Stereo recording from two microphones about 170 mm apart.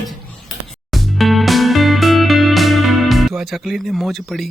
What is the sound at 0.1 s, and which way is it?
Music, centre (ahead or behind).